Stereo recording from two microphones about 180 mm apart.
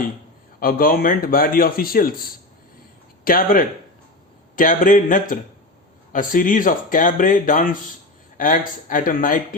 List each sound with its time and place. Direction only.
0.6 s a man's voice: 50° left (ahead or behind)